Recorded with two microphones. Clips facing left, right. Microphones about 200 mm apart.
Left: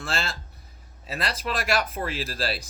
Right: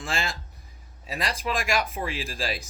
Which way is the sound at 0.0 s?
15° right (ahead or behind).